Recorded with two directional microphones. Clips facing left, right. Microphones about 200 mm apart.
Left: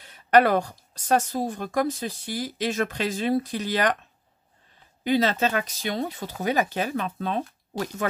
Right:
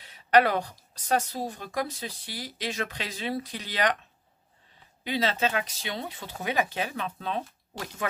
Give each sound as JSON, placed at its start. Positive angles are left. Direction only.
{"t": 0.0, "sound": "a woman's voice", "side_deg": 50}
{"t": 5.0, "sound": "a woman's voice", "side_deg": 45}